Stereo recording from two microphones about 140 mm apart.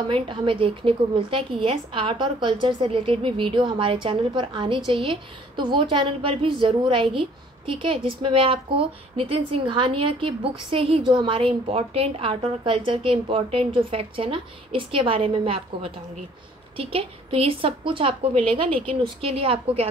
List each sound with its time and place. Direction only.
0.1 s a woman's voice: 40° right (ahead or behind)